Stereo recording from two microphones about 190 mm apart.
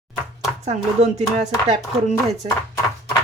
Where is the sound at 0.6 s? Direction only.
35° right (ahead or behind).